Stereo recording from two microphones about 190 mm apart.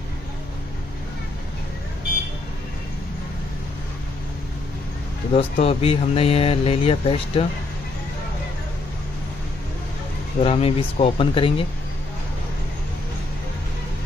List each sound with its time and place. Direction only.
5.3 s speech: 30° left (ahead or behind)
10.4 s speech: 30° left (ahead or behind)